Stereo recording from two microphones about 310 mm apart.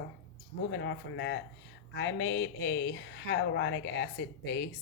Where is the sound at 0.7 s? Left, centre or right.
Left.